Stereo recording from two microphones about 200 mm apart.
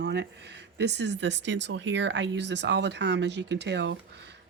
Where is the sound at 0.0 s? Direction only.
55° right (ahead or behind).